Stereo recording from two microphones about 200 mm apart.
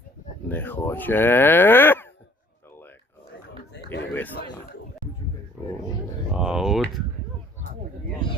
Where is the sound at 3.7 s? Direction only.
60° left (ahead or behind).